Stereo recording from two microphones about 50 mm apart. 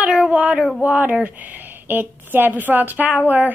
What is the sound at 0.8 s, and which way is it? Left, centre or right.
A woman's voice, right.